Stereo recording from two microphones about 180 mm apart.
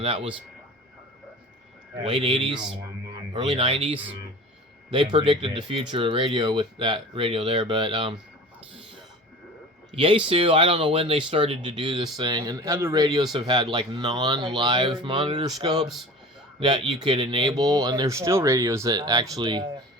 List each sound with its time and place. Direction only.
0.0 s a man's voice: 30° right (ahead or behind)
2.0 s speech: 30° right (ahead or behind)
9.9 s speech: 30° right (ahead or behind)